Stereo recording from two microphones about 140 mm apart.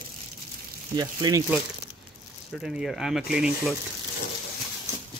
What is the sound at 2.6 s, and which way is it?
Speech, 5° right (ahead or behind).